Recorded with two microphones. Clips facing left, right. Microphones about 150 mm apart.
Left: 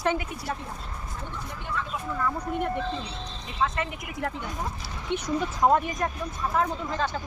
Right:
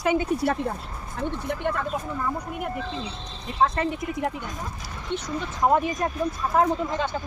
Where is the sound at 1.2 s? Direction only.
60° right (ahead or behind).